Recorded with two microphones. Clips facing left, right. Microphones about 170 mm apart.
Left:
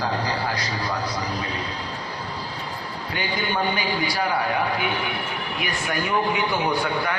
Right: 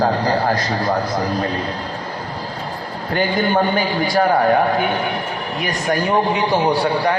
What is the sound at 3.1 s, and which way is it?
A man's voice, 50° right (ahead or behind).